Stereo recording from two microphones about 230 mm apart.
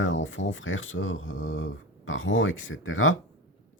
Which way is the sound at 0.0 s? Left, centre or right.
Left.